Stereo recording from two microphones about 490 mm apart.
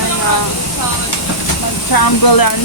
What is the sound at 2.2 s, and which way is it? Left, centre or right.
Speech, left.